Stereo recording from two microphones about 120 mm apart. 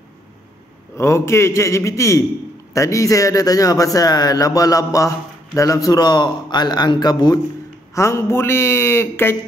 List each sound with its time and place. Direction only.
0.9 s a man's voice: 20° left (ahead or behind)
7.9 s a man's voice: 20° left (ahead or behind)